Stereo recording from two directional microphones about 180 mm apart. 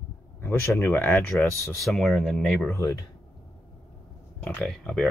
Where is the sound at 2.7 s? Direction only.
15° left (ahead or behind).